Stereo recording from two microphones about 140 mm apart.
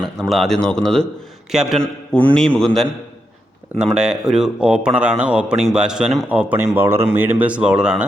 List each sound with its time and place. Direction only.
0.2 s speech: centre (ahead or behind)